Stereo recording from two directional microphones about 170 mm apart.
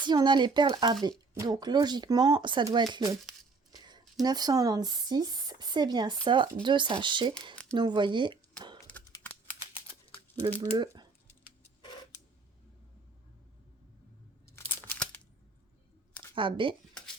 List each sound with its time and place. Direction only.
0.0 s speech: 25° right (ahead or behind)
10.6 s speech: 25° right (ahead or behind)
11.8 s a sound: 30° left (ahead or behind)
14.4 s crunch: 15° left (ahead or behind)
16.3 s speech: 30° right (ahead or behind)